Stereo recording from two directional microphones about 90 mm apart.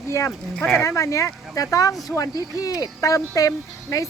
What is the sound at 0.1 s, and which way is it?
Speech, 30° left (ahead or behind).